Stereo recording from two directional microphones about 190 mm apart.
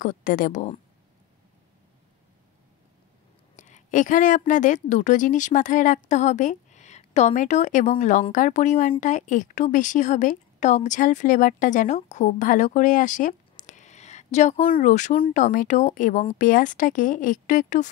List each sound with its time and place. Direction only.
0.0 s speech: 45° left (ahead or behind)
3.5 s a woman's voice: 40° left (ahead or behind)